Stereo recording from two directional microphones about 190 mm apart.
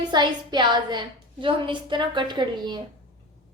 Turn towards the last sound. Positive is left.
turn(degrees=-20)  # may be behind; listen again after turning